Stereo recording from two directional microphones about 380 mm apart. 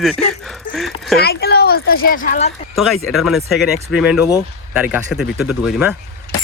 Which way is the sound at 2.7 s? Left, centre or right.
Centre.